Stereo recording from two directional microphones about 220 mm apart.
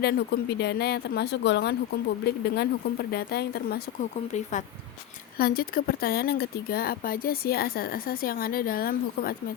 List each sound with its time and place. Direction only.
0.0 s speech: 45° left (ahead or behind)
4.3 s speech: 35° left (ahead or behind)